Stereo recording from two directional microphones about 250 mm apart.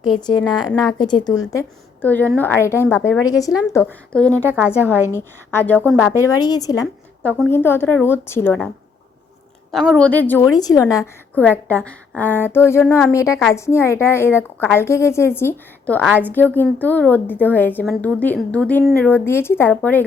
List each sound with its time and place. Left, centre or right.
0.0 s a woman's voice: centre
4.4 s a woman's voice: centre
5.1 s a woman's voice: centre
6.1 s a woman's voice: centre
9.7 s a woman's voice: centre